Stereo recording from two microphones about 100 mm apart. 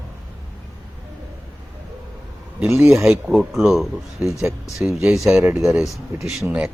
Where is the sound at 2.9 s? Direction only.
Centre (ahead or behind).